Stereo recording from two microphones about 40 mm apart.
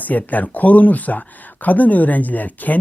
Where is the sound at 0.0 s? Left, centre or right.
Left.